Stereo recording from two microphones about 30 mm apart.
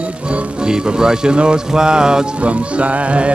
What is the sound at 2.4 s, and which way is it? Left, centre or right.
Music, right.